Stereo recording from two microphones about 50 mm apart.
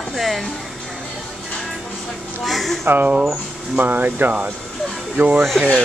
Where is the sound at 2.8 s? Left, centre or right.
Right.